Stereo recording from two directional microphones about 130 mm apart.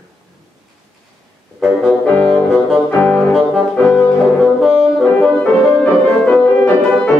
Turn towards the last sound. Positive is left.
turn(degrees=10)  # may be behind; listen again after turning